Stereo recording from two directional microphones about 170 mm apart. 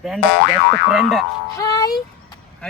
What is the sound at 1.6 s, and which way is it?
Music, 20° left (ahead or behind).